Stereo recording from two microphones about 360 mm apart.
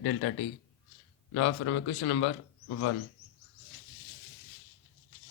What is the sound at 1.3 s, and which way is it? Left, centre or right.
Speech, left.